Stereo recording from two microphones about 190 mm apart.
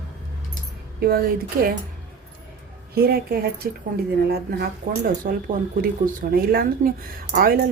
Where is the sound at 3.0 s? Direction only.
55° right (ahead or behind).